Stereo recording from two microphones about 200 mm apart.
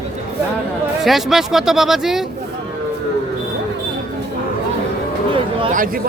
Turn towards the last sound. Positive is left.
turn(degrees=-25)  # may be behind; listen again after turning